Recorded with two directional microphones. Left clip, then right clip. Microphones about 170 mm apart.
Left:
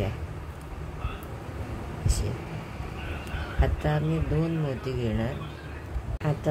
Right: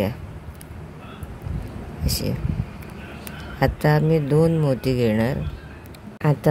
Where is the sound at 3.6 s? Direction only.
55° right (ahead or behind).